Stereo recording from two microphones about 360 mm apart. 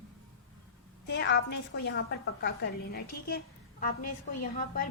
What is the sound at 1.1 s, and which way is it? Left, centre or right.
A woman's voice, left.